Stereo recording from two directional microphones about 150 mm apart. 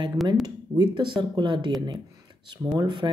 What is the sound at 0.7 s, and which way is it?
Speech, 30° right (ahead or behind).